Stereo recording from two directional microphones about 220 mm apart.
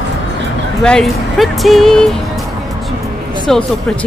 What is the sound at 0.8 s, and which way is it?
Speech, 5° left (ahead or behind).